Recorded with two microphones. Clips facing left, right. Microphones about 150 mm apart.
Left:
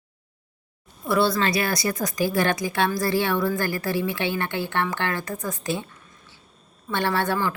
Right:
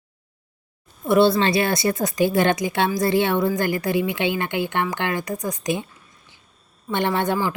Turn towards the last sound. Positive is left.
turn(degrees=-15)  # may be behind; listen again after turning